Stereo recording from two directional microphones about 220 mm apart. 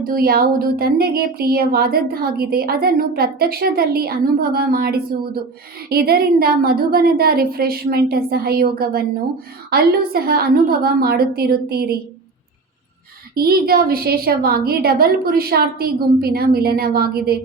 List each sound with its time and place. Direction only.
0.0 s speech: 40° right (ahead or behind)
13.3 s speech: 45° right (ahead or behind)